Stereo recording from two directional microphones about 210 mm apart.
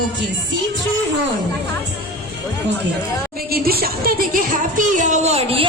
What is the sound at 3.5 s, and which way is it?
A woman's voice, 45° right (ahead or behind).